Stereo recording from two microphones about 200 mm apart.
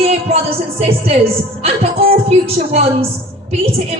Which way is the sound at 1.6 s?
30° right (ahead or behind).